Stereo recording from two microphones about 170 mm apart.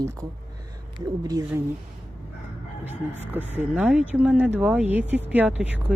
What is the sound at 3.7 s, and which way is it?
Speech, 5° right (ahead or behind).